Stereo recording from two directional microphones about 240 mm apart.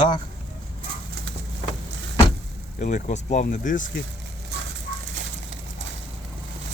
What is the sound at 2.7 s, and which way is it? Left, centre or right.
Speech, left.